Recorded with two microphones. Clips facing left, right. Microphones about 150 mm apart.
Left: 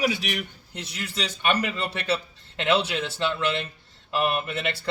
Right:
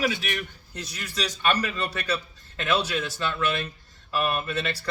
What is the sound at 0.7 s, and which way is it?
Speech, 25° left (ahead or behind).